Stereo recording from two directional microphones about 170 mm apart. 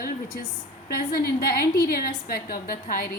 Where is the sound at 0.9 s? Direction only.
60° left (ahead or behind).